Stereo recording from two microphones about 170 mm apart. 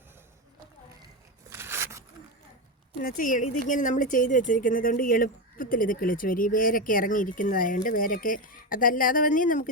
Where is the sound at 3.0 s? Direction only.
55° left (ahead or behind).